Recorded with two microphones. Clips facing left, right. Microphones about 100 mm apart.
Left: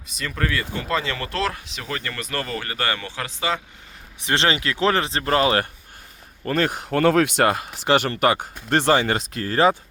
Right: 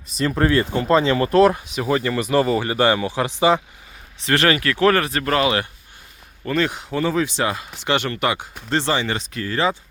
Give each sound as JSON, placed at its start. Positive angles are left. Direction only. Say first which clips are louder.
{"t": 0.2, "sound": "speech", "louder": "right 8 dB", "side_deg": -30}
{"t": 4.2, "sound": "speech", "louder": "right 3 dB", "side_deg": 20}
{"t": 7.9, "sound": "speech", "louder": "left 2 dB", "side_deg": 40}